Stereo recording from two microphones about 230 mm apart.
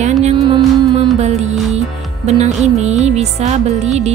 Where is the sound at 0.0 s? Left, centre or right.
Right.